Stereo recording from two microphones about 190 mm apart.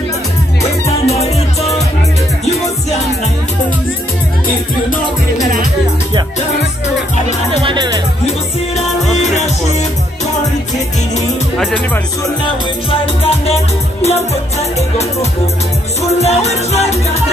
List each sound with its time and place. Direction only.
0.8 s music: 35° left (ahead or behind)
7.6 s music: 25° right (ahead or behind)
11.5 s music: 5° left (ahead or behind)
13.0 s music: 30° left (ahead or behind)